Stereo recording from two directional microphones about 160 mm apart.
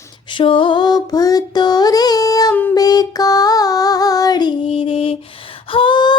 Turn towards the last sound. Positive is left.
turn(degrees=30)  # may be behind; listen again after turning